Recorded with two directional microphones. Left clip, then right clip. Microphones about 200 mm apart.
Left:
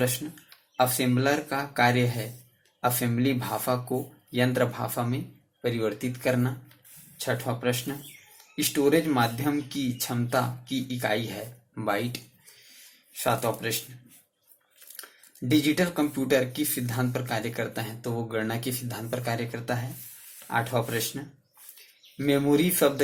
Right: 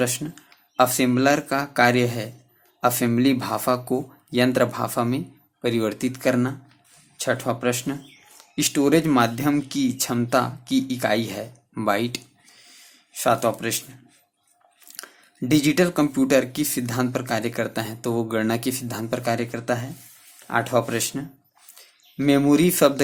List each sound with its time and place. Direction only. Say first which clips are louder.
0.8 s speech: right 6 dB; 45° right (ahead or behind)
15.0 s speech: right 6 dB; 40° right (ahead or behind)